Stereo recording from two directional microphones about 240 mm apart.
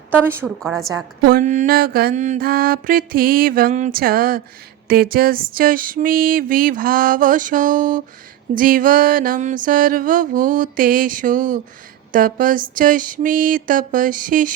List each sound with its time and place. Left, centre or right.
0.3 s a woman's voice: centre
1.2 s mantra: right